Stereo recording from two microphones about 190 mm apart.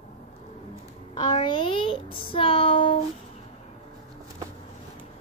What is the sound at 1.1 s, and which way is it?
A child's voice, 25° left (ahead or behind).